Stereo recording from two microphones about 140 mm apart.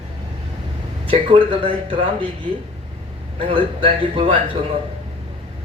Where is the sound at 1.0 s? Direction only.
40° right (ahead or behind).